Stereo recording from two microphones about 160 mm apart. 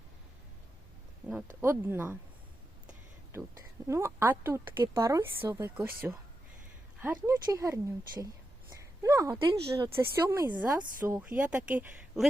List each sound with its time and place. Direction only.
1.6 s speech: 15° right (ahead or behind)
3.8 s a woman's voice: 15° right (ahead or behind)
9.0 s a sound: 20° right (ahead or behind)
9.9 s speech: 15° right (ahead or behind)